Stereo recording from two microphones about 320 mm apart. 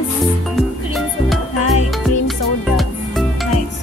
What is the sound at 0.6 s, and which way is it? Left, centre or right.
Music, centre.